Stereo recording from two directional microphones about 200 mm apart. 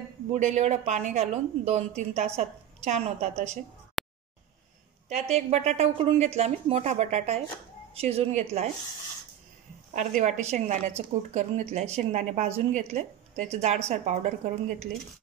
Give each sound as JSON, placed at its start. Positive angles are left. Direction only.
{"t": 0.3, "sound": "speech", "side_deg": -35}
{"t": 4.0, "sound": "a sound", "side_deg": 0}
{"t": 5.1, "sound": "speech", "side_deg": -35}
{"t": 9.9, "sound": "speech", "side_deg": -35}